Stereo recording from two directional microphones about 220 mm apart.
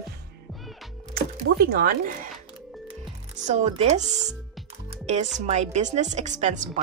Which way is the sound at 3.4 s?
30° right (ahead or behind).